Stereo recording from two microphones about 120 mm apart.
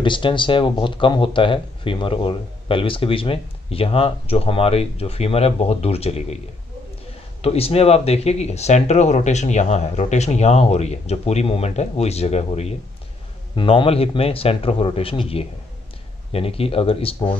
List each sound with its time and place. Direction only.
0.0 s speech: 45° left (ahead or behind)
7.4 s speech: 55° left (ahead or behind)
13.6 s speech: 45° left (ahead or behind)